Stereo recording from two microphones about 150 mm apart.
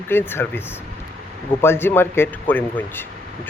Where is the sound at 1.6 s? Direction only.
15° left (ahead or behind).